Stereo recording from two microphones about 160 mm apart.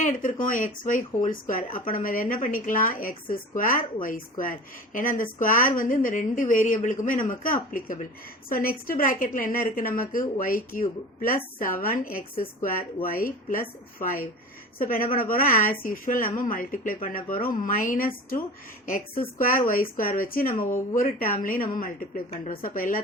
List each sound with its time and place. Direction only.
0.0 s speech: 50° left (ahead or behind)